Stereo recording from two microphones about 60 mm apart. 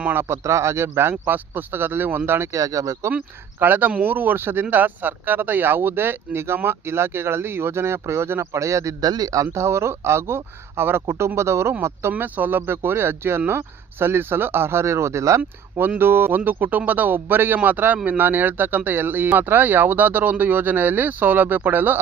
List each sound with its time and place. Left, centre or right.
0.1 s speech: right
0.4 s speech: right
1.2 s speech: right
2.5 s a man's voice: right
3.6 s speech: right
8.5 s a man's voice: right
9.6 s speech: right
12.1 s speech: right
16.0 s speech: right